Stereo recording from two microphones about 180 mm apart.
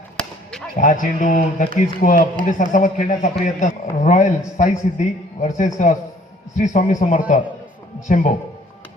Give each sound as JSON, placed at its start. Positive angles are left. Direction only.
{"t": 0.2, "sound": "chop", "side_deg": 5}
{"t": 0.8, "sound": "a man's voice", "side_deg": 45}